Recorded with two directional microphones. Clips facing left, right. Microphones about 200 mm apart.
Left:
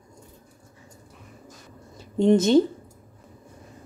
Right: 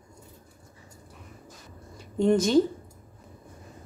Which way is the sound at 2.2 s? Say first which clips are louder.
Left 4 dB; 25° left (ahead or behind).